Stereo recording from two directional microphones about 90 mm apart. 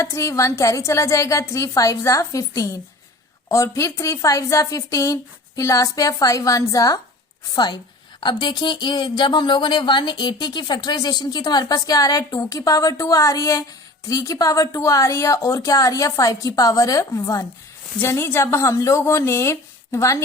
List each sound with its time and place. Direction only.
0.0 s speech: 35° left (ahead or behind)
7.5 s speech: 50° left (ahead or behind)
18.0 s speech: 25° left (ahead or behind)